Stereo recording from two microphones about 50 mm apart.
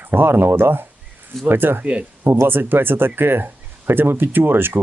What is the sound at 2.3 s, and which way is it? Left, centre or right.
Speech, right.